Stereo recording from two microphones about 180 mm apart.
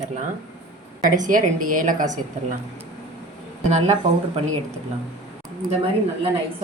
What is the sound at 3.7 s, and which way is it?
Speech, 40° right (ahead or behind).